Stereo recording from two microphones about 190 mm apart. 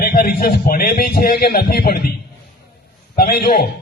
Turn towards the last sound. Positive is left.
turn(degrees=55)  # may be behind; listen again after turning